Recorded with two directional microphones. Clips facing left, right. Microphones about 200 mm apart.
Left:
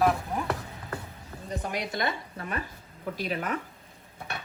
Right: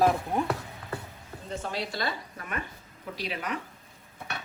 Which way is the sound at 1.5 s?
15° left (ahead or behind).